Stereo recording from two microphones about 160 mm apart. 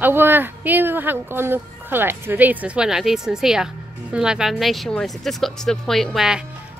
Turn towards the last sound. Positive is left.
turn(degrees=-5)  # may be behind; listen again after turning